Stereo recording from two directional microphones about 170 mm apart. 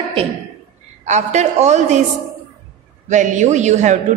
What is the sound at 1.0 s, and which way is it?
A woman's voice, 45° right (ahead or behind).